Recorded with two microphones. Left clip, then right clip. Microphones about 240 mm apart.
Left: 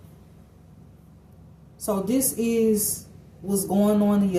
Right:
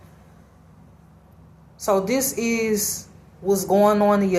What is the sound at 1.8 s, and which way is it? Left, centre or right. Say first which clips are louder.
A woman's voice: right 5 dB; right.